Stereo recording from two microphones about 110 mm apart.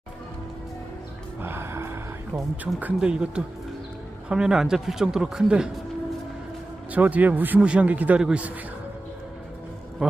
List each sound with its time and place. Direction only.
1.4 s music: 20° right (ahead or behind)
2.7 s a man's voice: 10° right (ahead or behind)
6.9 s a man's voice: 15° right (ahead or behind)
10.0 s a man's voice: 10° right (ahead or behind)